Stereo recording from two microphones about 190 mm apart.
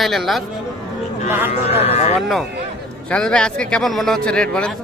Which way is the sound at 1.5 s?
35° left (ahead or behind).